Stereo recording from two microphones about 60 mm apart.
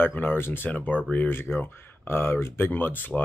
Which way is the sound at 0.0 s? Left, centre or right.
Left.